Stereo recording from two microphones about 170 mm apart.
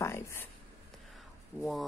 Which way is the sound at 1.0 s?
Centre (ahead or behind).